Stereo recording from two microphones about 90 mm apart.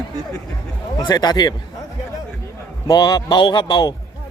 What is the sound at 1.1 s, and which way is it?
Speech, 50° left (ahead or behind).